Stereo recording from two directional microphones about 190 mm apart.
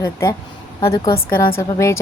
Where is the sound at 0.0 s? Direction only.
15° left (ahead or behind).